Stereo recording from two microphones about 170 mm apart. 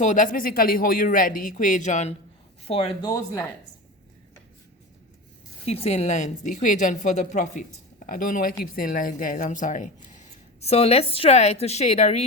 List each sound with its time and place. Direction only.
0.0 s speech: 50° left (ahead or behind)
2.6 s speech: 35° left (ahead or behind)
5.6 s speech: 35° left (ahead or behind)